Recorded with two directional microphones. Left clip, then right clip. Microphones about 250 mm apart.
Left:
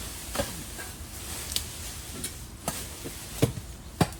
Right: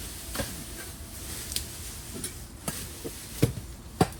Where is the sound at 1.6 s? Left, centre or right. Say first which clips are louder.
Left 3 dB; left.